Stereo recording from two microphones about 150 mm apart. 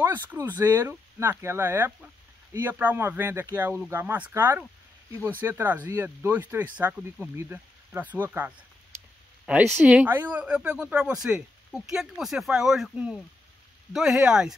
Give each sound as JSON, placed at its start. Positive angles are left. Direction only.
{"t": 0.0, "sound": "speech", "side_deg": -15}